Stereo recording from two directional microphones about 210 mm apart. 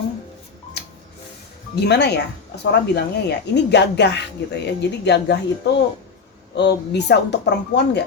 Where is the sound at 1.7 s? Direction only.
50° left (ahead or behind).